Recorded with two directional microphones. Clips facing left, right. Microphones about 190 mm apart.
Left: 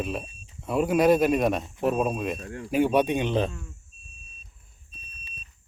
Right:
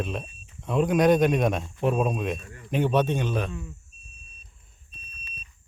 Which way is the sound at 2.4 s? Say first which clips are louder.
Left 10 dB; 90° left.